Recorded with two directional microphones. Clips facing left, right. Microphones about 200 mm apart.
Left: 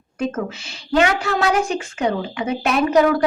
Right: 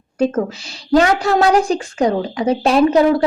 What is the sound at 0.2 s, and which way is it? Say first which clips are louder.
A woman's voice: right 6 dB; 35° right (ahead or behind).